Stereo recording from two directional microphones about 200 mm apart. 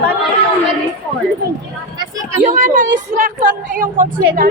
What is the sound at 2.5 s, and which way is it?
A woman's voice, 40° right (ahead or behind).